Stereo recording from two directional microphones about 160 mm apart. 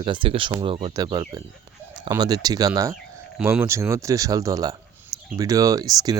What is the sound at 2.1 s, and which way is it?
Speech, 25° right (ahead or behind).